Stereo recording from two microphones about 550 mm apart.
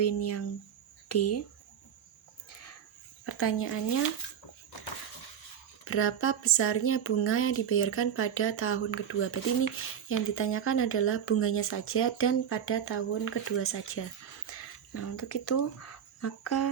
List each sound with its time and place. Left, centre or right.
0.2 s speech: left
3.2 s speech: left
5.9 s speech: left